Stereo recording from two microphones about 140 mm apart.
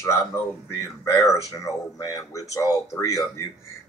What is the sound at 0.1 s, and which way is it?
Speech, 20° left (ahead or behind).